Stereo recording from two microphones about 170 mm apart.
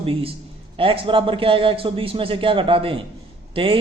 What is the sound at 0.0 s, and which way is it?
A man's voice, 35° right (ahead or behind).